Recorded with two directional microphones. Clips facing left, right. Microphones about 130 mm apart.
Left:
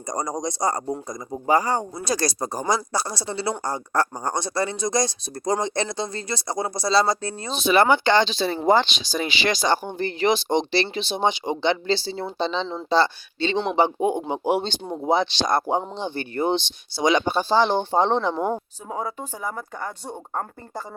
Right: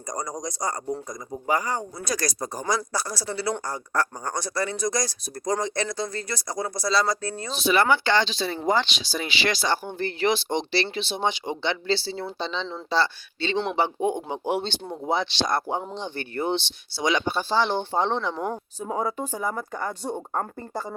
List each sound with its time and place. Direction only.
0.1 s speech: 30° left (ahead or behind)
18.9 s speech: centre (ahead or behind)